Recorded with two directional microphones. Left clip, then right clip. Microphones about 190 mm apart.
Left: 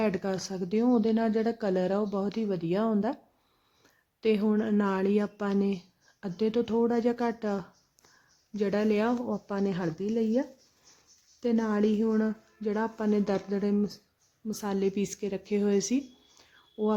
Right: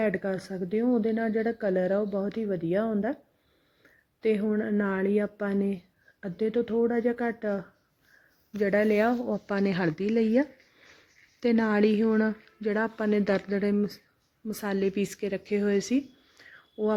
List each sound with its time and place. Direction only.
0.0 s speech: 5° right (ahead or behind)
4.2 s speech: 5° right (ahead or behind)
9.5 s speech: 20° right (ahead or behind)